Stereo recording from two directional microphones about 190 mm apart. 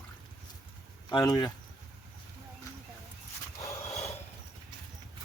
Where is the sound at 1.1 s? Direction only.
20° left (ahead or behind).